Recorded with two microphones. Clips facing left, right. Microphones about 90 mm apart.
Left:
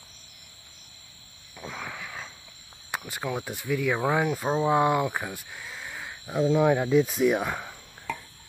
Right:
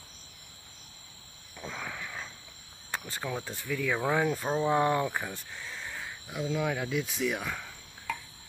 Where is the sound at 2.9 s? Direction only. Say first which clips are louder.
Left 4 dB; 15° left (ahead or behind).